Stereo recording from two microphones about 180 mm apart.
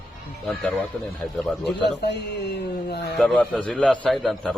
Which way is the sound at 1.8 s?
70° left (ahead or behind).